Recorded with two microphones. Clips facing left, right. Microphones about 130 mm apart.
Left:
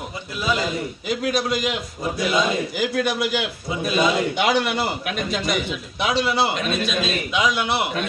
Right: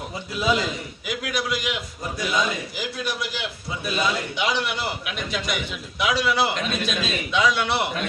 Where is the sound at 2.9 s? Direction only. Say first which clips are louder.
Left 8 dB; 60° left (ahead or behind); by 5.4 s 45° left (ahead or behind).